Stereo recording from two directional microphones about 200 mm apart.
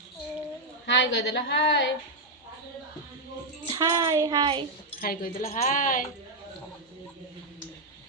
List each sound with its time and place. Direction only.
0.9 s a woman's voice: 65° left (ahead or behind)
3.7 s a woman's voice: 20° right (ahead or behind)
4.9 s speech: 45° left (ahead or behind)